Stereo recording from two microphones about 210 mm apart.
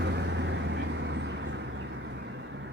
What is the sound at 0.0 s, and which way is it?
Vehicle, 55° right (ahead or behind).